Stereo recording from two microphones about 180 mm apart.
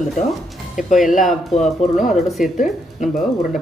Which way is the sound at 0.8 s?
45° left (ahead or behind).